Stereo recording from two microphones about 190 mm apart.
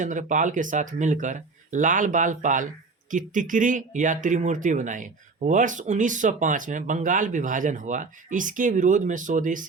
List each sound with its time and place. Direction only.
0.0 s speech: 40° right (ahead or behind)